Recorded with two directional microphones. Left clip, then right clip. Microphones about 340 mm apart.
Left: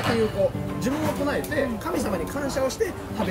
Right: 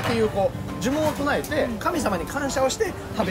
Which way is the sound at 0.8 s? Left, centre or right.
Centre.